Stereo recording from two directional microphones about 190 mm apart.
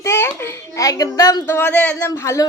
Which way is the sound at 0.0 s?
15° left (ahead or behind).